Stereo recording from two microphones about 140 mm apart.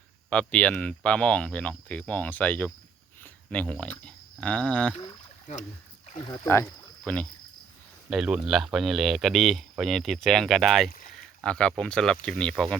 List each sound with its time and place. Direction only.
0.3 s speech: 10° left (ahead or behind)
6.1 s speech: 40° left (ahead or behind)
6.3 s speech: 20° left (ahead or behind)
7.0 s speech: 5° left (ahead or behind)
8.1 s speech: 5° right (ahead or behind)